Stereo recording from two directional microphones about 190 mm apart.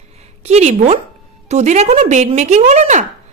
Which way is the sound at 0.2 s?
35° right (ahead or behind).